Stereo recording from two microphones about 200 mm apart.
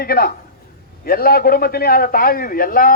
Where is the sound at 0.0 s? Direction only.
50° left (ahead or behind).